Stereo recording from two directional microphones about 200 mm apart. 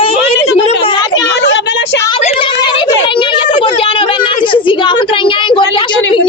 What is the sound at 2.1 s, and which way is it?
A woman's voice, 25° left (ahead or behind).